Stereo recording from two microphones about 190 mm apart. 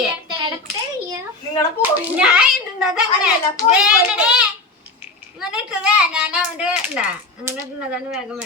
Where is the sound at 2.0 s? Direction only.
5° right (ahead or behind).